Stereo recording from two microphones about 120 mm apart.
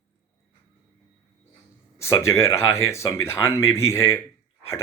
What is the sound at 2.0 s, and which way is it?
Speech, 25° left (ahead or behind).